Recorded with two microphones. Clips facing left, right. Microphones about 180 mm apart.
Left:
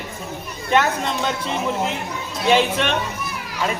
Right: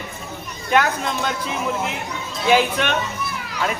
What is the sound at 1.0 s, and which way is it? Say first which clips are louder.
Speech: left 1 dB; 35° left (ahead or behind).